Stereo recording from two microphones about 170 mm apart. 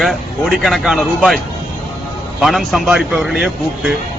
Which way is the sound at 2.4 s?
Centre (ahead or behind).